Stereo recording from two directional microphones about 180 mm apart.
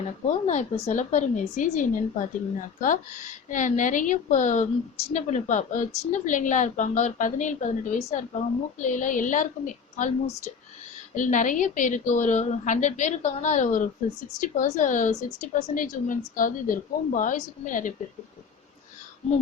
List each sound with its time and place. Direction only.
0.3 s a woman's voice: 40° left (ahead or behind)